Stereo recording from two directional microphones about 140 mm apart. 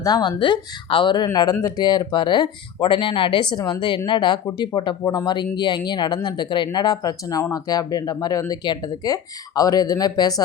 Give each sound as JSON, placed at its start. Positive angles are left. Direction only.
{"t": 0.0, "sound": "speech", "side_deg": 30}